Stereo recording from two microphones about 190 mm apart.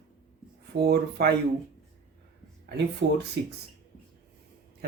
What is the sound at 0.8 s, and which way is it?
Speech, 55° right (ahead or behind).